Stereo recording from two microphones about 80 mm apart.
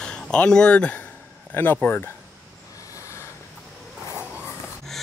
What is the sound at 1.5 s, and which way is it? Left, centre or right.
Speech, left.